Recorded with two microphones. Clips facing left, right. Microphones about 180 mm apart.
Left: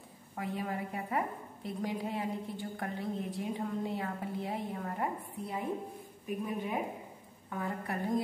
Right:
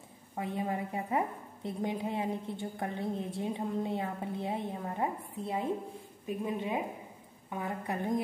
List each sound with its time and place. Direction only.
0.4 s a woman's voice: 25° right (ahead or behind)